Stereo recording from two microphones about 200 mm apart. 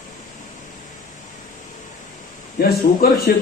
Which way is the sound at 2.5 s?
50° left (ahead or behind).